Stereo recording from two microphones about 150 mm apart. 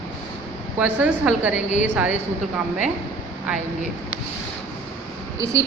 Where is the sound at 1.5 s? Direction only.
55° left (ahead or behind).